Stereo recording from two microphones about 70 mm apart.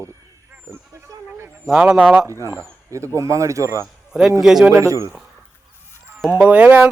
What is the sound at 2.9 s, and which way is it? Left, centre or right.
Speech, right.